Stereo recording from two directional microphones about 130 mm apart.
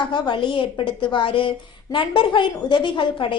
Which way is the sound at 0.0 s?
35° left (ahead or behind).